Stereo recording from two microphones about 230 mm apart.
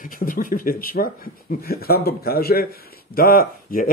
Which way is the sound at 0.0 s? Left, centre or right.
Left.